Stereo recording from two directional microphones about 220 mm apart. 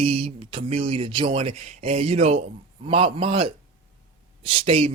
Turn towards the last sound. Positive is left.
turn(degrees=-25)  # may be behind; listen again after turning